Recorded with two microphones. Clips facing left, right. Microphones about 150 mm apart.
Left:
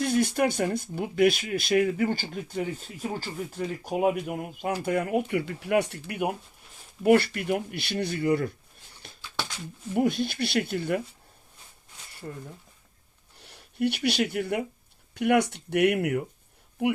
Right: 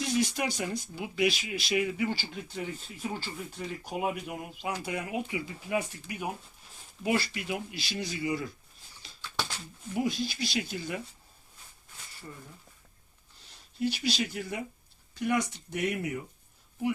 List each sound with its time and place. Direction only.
0.0 s speech: 55° left (ahead or behind)
9.0 s a sound: 55° left (ahead or behind)
9.9 s speech: 60° left (ahead or behind)
12.2 s speech: 50° left (ahead or behind)
13.4 s speech: 60° left (ahead or behind)